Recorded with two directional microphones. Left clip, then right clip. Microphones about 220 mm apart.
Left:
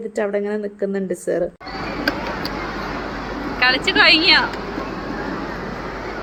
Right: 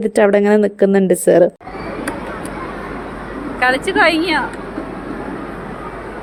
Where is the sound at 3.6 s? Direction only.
30° right (ahead or behind).